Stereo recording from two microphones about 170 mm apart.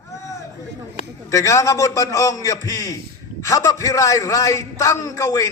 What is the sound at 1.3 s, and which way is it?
A man's voice, 20° left (ahead or behind).